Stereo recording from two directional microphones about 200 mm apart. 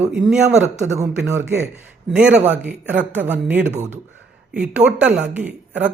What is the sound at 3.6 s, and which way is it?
Speech, 35° right (ahead or behind).